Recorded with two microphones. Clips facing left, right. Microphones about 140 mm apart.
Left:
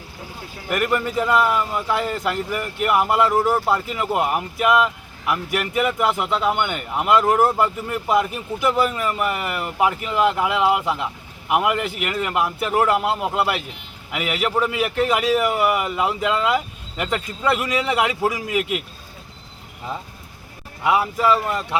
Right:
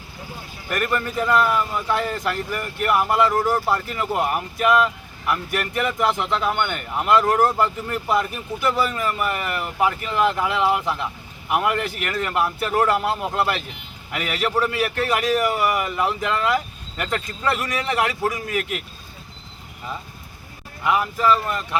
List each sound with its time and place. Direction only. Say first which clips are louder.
0.7 s a man's voice: left 3 dB; 15° left (ahead or behind)
20.8 s a man's voice: left 1 dB; 10° left (ahead or behind)